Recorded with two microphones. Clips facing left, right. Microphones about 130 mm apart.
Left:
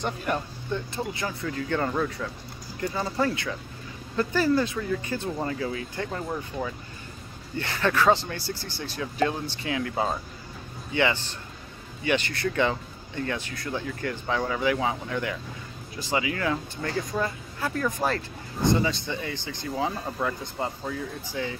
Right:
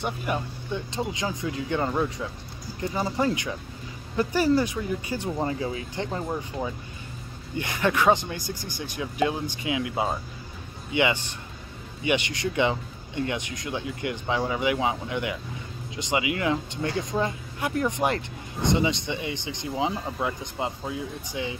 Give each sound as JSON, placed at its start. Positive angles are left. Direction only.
{"t": 0.0, "sound": "speech", "side_deg": -10}